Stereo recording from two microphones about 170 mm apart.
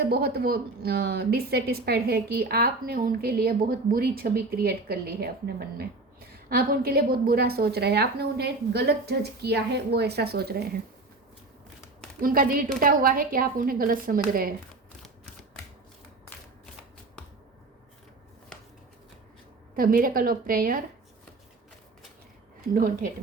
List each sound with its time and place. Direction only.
0.0 s a woman's voice: 65° right (ahead or behind)
12.2 s a woman's voice: 60° right (ahead or behind)
19.7 s a woman's voice: 60° right (ahead or behind)
22.7 s a woman's voice: 55° right (ahead or behind)